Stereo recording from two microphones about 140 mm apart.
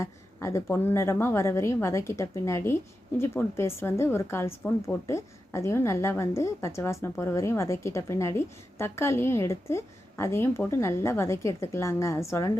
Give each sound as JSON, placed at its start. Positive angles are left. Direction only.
{"t": 0.0, "sound": "a woman's voice", "side_deg": 20}